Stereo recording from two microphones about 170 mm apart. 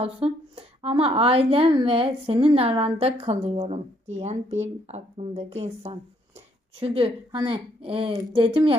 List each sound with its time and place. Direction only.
0.0 s a woman's voice: 35° right (ahead or behind)